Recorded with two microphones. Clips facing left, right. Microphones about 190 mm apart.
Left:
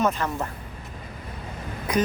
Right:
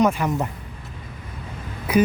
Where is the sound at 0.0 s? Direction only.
15° right (ahead or behind).